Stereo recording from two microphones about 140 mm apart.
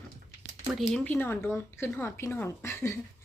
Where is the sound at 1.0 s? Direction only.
15° left (ahead or behind).